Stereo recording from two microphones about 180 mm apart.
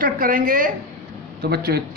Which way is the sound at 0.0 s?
50° right (ahead or behind).